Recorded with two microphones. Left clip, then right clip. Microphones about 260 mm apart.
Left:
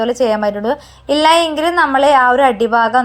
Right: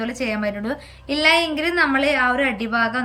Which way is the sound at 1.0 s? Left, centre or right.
Centre.